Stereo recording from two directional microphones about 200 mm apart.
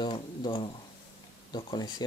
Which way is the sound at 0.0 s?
25° left (ahead or behind).